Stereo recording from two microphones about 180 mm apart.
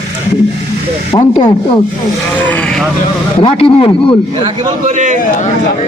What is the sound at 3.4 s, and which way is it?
Speech, 30° left (ahead or behind).